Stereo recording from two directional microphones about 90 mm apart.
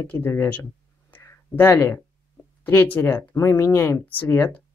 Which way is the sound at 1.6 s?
30° left (ahead or behind).